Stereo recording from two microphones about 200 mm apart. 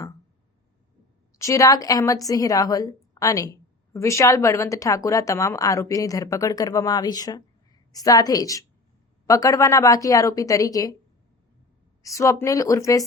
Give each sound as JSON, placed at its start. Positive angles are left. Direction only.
{"t": 1.4, "sound": "a woman's voice", "side_deg": 15}
{"t": 12.0, "sound": "a woman's voice", "side_deg": 15}